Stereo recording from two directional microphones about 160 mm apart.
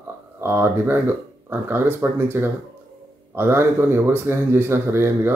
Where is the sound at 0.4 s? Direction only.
15° right (ahead or behind).